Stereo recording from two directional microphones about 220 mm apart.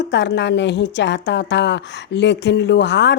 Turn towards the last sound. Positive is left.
turn(degrees=50)  # may be behind; listen again after turning